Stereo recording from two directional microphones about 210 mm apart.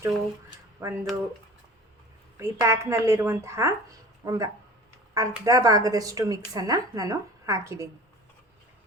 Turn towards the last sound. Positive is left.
turn(degrees=-15)  # may be behind; listen again after turning